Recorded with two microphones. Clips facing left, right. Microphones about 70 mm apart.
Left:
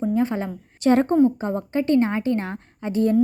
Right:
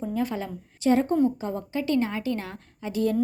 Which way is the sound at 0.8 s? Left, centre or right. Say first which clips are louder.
Left 4 dB; left.